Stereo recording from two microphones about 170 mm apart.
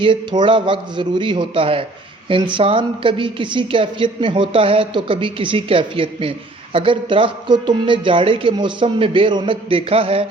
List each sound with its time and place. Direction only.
0.0 s a man's voice: 30° right (ahead or behind)